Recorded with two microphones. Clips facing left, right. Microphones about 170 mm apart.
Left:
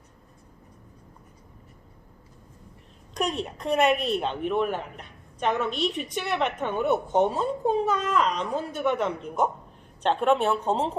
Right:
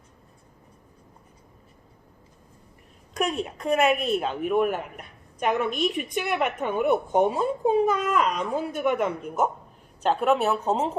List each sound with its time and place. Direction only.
3.2 s a woman's voice: 5° right (ahead or behind)